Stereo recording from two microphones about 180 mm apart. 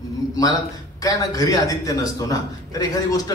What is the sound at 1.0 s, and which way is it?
A man's voice, 20° left (ahead or behind).